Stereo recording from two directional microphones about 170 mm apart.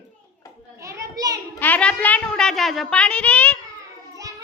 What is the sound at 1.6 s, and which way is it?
A child's voice, 10° left (ahead or behind).